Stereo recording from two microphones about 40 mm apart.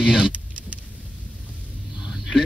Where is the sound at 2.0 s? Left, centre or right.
Centre.